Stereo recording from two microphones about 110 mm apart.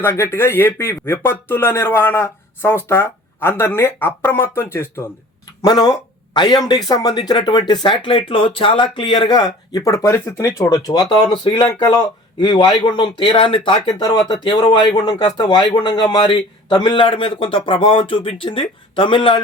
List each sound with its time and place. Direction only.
0.0 s speech: 20° left (ahead or behind)
5.6 s a man's voice: 35° left (ahead or behind)
11.1 s a man's voice: 50° left (ahead or behind)
13.8 s a man's voice: 35° left (ahead or behind)